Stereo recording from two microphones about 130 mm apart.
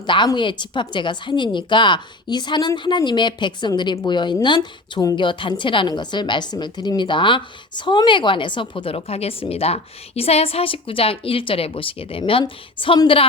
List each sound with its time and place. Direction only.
0.0 s a woman's voice: 35° left (ahead or behind)